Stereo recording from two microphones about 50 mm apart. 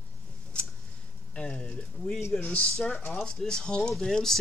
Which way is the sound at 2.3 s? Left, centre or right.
Left.